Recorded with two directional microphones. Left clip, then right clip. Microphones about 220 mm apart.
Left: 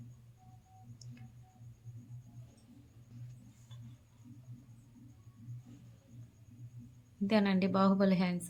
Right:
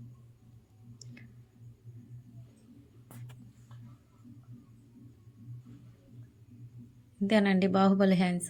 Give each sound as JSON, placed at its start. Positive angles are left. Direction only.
{"t": 7.3, "sound": "a woman's voice", "side_deg": -15}